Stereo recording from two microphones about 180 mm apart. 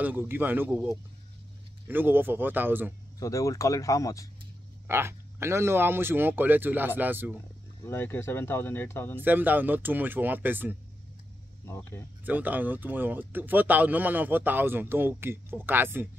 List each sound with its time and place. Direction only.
0.0 s speech: 10° right (ahead or behind)
3.2 s speech: 15° left (ahead or behind)
4.8 s speech: 15° right (ahead or behind)
7.8 s speech: 10° left (ahead or behind)
9.2 s speech: 10° right (ahead or behind)
11.6 s speech: 15° left (ahead or behind)
12.3 s speech: 10° right (ahead or behind)